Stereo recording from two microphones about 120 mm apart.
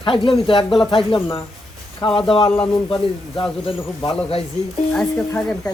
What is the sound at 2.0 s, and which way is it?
Speech, 45° left (ahead or behind).